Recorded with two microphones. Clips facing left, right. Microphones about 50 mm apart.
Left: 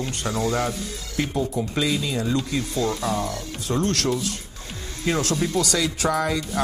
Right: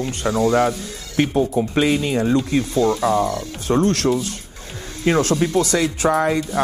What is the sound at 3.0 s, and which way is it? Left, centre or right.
Speech, right.